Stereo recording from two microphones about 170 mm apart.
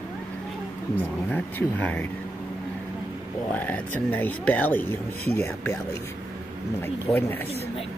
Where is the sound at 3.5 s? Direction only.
10° left (ahead or behind).